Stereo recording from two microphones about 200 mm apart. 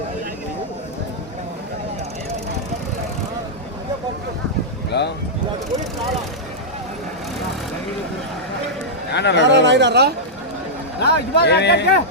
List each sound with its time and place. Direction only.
4.9 s a sound: 55° left (ahead or behind)
9.1 s speech: 60° left (ahead or behind)
9.6 s speech: 60° right (ahead or behind)
11.0 s speech: 55° left (ahead or behind)